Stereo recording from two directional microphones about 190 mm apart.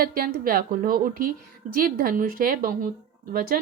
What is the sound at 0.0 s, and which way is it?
A woman's voice, 50° right (ahead or behind).